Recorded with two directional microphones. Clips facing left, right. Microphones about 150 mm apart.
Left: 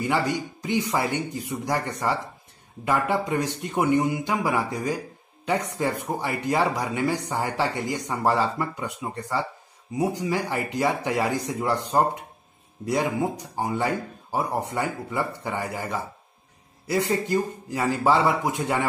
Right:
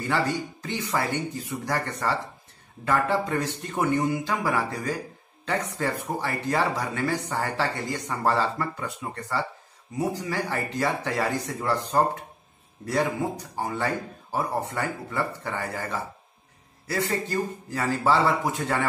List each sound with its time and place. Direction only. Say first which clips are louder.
0.0 s speech: left 1 dB; 15° left (ahead or behind)